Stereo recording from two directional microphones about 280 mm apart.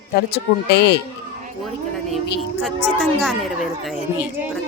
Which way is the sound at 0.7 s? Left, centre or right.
Left.